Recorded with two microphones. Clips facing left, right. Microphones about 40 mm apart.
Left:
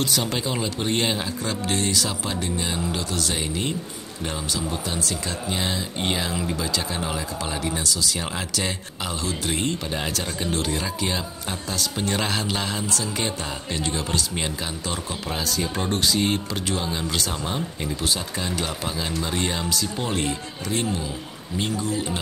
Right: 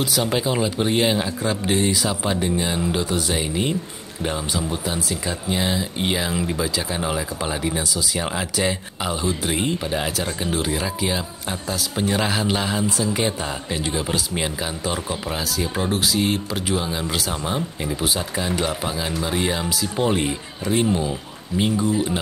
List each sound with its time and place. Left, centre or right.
0.0 s speech: centre